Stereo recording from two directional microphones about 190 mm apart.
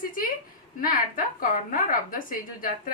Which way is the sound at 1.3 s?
45° left (ahead or behind).